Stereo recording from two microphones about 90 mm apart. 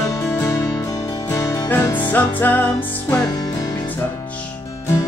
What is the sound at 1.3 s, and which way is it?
Music, 30° left (ahead or behind).